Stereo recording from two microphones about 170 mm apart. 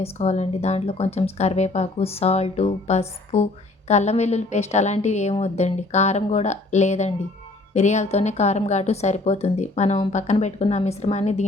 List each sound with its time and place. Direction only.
0.0 s speech: 40° left (ahead or behind)